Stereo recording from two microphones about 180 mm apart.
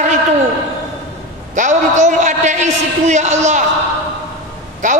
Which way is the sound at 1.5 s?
45° right (ahead or behind).